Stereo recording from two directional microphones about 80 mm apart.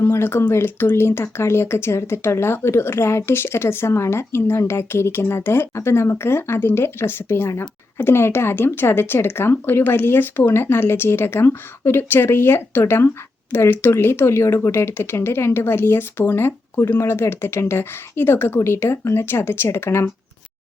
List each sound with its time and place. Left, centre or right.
0.0 s speech: left